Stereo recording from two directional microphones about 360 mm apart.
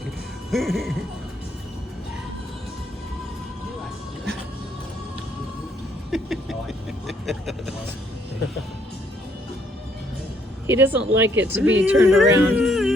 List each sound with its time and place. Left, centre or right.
0.5 s speech: centre
6.1 s a sound: centre
10.7 s speech: centre
11.6 s speech: right
11.9 s speech: centre